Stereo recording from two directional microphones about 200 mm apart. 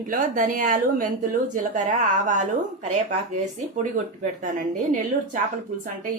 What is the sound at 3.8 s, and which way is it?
Speech, 40° right (ahead or behind).